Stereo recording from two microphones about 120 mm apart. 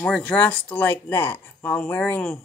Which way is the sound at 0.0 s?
10° left (ahead or behind).